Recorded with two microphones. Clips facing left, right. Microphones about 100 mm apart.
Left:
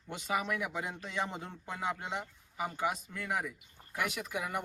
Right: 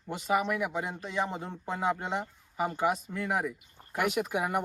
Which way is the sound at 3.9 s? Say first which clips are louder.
Right 7 dB; 50° right (ahead or behind).